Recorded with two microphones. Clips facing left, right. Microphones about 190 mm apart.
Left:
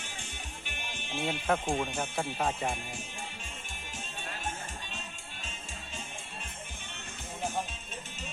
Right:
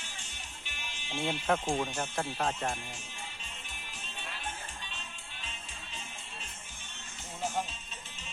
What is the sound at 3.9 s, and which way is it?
Music, 45° left (ahead or behind).